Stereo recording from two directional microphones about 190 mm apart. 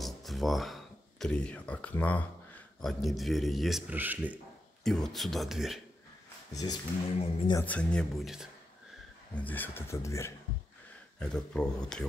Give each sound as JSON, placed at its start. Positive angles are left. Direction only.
{"t": 0.0, "sound": "speech", "side_deg": 0}
{"t": 4.8, "sound": "speech", "side_deg": 0}
{"t": 6.5, "sound": "speech", "side_deg": 20}
{"t": 7.6, "sound": "speech", "side_deg": 5}
{"t": 11.1, "sound": "speech", "side_deg": 5}